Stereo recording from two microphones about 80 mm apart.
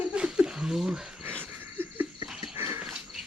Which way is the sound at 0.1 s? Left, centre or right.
Centre.